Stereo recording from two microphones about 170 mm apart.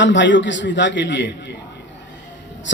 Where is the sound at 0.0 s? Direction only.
90° left.